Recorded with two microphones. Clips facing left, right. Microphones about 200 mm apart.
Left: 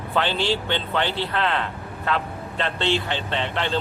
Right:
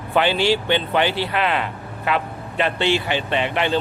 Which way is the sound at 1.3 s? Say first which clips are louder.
Right 2 dB; 10° right (ahead or behind).